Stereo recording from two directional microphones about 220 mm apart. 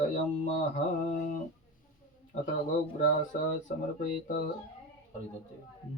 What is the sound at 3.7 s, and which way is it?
Speech, 35° left (ahead or behind).